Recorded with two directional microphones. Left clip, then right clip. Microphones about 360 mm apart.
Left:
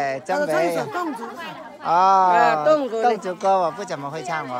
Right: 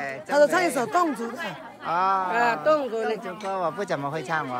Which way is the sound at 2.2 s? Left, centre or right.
Left.